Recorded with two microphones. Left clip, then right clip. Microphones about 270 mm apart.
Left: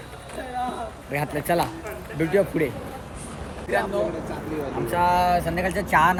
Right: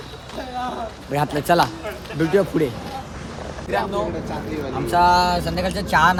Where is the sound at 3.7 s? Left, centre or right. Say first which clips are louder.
Right 1 dB; centre.